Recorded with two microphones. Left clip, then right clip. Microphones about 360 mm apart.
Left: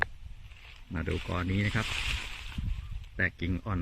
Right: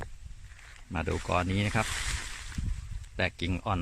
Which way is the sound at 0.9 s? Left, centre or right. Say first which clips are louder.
Right 5 dB; centre.